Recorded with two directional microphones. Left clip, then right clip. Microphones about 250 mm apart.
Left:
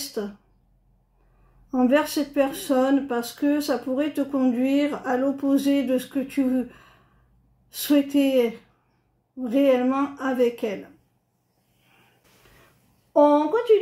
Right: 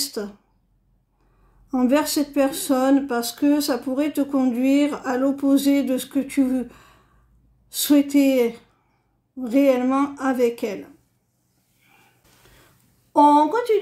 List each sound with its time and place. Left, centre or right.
0.2 s speech: right
1.7 s speech: right
9.5 s speech: right
13.1 s speech: right